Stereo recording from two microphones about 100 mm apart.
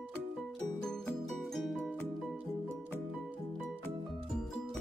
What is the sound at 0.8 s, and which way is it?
Music, 5° left (ahead or behind).